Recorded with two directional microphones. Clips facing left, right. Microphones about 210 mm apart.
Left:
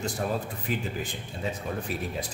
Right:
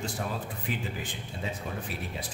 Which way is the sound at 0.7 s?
40° left (ahead or behind).